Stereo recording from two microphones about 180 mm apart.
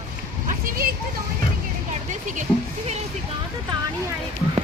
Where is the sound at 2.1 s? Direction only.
45° right (ahead or behind).